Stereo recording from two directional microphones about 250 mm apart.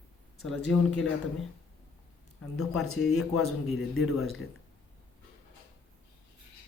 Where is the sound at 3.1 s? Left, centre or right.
Left.